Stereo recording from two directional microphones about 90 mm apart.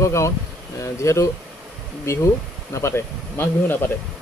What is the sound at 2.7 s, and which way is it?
Speech, 30° left (ahead or behind).